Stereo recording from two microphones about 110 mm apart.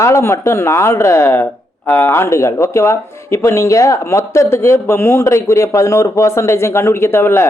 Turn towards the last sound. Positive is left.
turn(degrees=25)  # may be behind; listen again after turning